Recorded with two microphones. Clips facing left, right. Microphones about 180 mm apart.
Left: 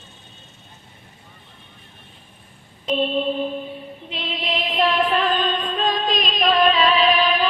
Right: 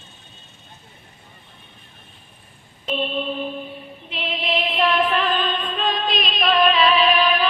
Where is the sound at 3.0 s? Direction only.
35° left (ahead or behind).